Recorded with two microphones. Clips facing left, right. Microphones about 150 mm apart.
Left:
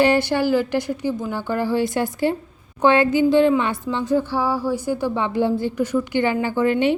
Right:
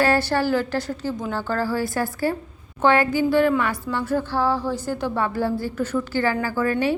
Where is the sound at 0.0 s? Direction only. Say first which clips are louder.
Left 3 dB; 15° left (ahead or behind).